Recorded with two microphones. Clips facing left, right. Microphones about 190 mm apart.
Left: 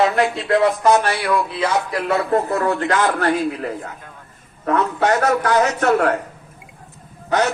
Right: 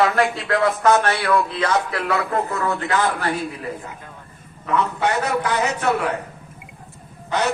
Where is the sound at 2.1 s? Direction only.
30° left (ahead or behind).